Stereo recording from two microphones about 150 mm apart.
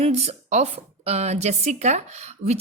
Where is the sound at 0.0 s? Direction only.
45° right (ahead or behind).